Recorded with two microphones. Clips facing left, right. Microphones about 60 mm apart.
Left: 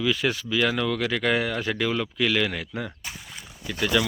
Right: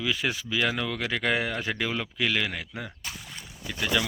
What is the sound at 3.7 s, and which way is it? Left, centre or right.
Speech, centre.